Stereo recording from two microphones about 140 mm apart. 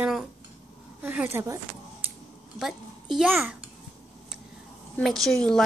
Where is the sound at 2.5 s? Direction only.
Centre (ahead or behind).